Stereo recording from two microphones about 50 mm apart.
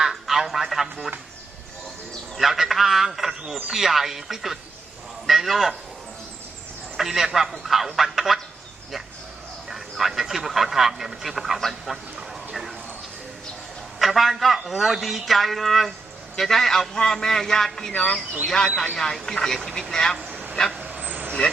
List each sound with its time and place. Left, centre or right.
0.0 s a sound: centre
2.3 s a sound: centre
3.7 s speech: centre
6.9 s speech: centre
9.6 s speech: centre
14.0 s a man's voice: centre
17.9 s speech: left
18.4 s a man's voice: centre
20.1 s vehicle: centre
20.9 s vehicle: right